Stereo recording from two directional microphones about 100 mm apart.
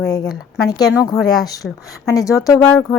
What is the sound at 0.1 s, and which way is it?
Speech, 45° left (ahead or behind).